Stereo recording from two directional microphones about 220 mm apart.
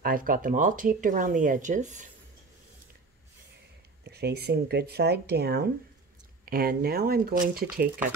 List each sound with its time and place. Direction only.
0.0 s speech: 40° right (ahead or behind)
4.0 s speech: 50° right (ahead or behind)